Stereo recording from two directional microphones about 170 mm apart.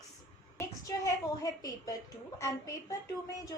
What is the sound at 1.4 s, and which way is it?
A woman's voice, 20° left (ahead or behind).